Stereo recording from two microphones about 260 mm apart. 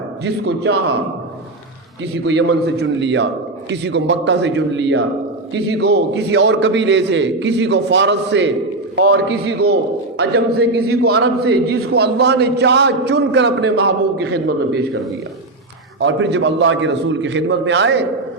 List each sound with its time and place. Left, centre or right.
0.3 s a man's voice: right
2.2 s a man's voice: right
16.0 s a man's voice: right